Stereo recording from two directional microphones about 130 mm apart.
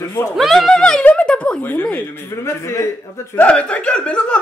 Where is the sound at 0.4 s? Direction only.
Centre (ahead or behind); by 2.9 s 20° left (ahead or behind).